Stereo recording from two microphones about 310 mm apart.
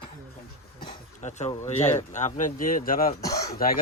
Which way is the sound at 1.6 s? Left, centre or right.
Left.